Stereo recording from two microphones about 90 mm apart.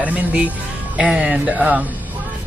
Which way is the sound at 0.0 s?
15° right (ahead or behind).